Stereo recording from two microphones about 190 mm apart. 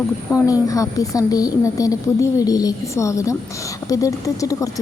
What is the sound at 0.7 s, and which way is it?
A woman's voice, 20° left (ahead or behind).